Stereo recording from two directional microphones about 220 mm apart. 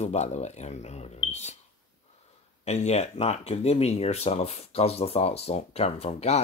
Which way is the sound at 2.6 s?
30° left (ahead or behind).